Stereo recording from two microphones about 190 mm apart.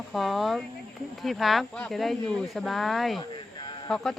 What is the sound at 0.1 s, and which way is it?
Speech, centre (ahead or behind).